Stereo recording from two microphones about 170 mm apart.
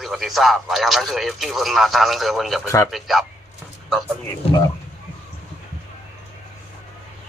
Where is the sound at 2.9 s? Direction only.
Centre (ahead or behind).